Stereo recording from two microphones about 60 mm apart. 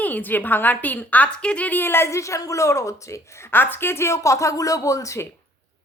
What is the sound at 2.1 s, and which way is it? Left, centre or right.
Speech, left.